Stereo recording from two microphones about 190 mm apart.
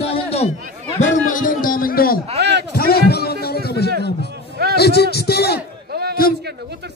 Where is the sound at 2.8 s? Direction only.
55° left (ahead or behind).